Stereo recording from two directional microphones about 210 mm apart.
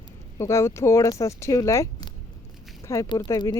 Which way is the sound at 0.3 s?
15° left (ahead or behind).